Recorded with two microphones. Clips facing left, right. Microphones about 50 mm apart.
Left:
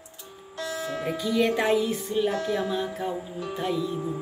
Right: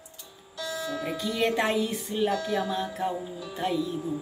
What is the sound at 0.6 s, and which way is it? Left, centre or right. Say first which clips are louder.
Music: left 1 dB; left.